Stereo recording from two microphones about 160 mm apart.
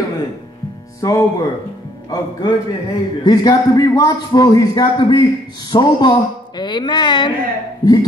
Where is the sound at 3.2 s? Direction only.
25° left (ahead or behind).